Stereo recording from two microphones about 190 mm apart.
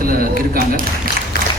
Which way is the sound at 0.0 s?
50° right (ahead or behind).